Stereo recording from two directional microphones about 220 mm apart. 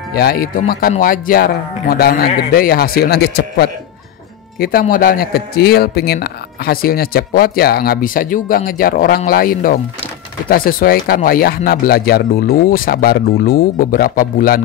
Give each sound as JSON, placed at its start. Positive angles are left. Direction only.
{"t": 0.1, "sound": "speech", "side_deg": 45}